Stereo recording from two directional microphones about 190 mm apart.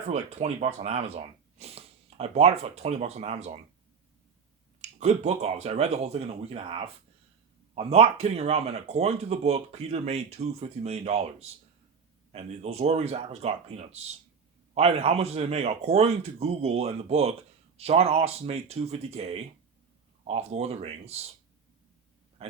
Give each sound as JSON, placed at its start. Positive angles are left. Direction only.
{"t": 0.1, "sound": "speech", "side_deg": -35}
{"t": 4.8, "sound": "speech", "side_deg": -35}
{"t": 22.4, "sound": "a sound", "side_deg": -30}